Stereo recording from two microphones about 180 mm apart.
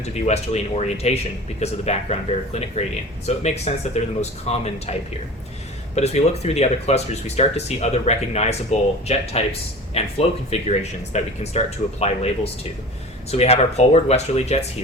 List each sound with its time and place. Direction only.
0.0 s speech: 40° left (ahead or behind)
6.0 s speech: 35° left (ahead or behind)